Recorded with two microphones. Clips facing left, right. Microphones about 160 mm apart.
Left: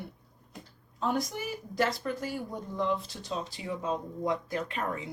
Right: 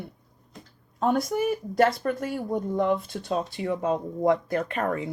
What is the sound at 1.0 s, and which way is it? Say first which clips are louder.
Speech: right 8 dB; 55° right (ahead or behind).